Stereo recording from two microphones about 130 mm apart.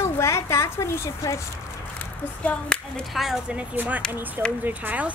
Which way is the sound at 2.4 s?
10° left (ahead or behind).